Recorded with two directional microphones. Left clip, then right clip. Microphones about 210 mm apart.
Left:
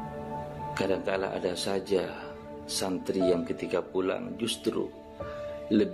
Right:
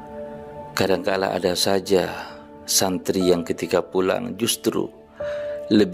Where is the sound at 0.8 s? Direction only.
50° right (ahead or behind).